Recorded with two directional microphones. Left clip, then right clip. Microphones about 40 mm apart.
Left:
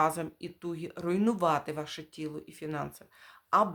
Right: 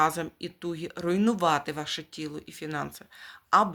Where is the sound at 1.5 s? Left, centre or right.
Centre.